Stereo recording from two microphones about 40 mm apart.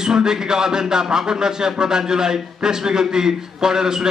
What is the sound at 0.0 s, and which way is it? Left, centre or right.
Speech, centre.